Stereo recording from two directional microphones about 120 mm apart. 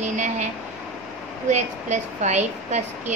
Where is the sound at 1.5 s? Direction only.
75° right (ahead or behind).